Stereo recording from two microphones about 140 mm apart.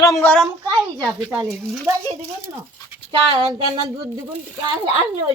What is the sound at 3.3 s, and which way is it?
Speech, 35° right (ahead or behind).